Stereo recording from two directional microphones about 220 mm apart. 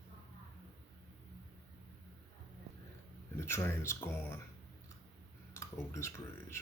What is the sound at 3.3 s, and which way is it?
Speech, 10° left (ahead or behind).